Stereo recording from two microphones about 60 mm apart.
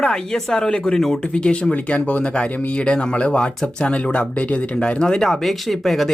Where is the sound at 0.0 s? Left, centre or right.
Centre.